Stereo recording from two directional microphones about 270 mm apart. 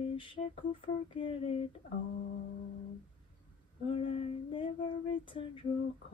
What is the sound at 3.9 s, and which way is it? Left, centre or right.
Female singing, centre.